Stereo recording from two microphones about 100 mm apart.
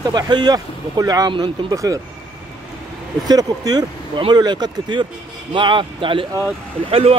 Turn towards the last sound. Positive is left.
turn(degrees=-80)